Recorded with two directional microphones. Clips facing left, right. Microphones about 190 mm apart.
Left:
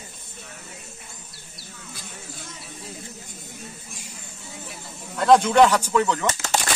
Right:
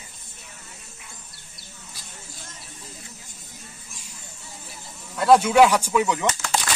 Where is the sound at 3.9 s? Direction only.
60° left (ahead or behind).